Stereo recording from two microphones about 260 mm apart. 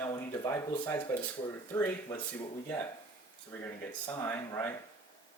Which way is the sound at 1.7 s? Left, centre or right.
Centre.